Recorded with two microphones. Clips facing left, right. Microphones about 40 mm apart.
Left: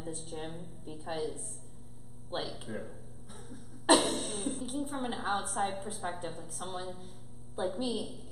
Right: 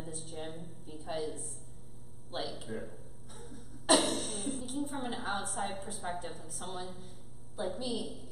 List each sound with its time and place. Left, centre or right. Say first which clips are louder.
0.0 s a woman's voice: left 2 dB; centre